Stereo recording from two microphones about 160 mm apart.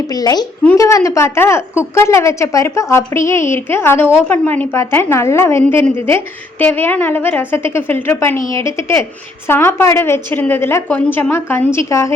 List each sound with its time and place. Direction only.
0.1 s a woman's voice: 25° left (ahead or behind)